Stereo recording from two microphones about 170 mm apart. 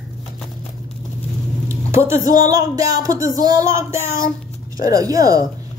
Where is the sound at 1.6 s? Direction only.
15° right (ahead or behind).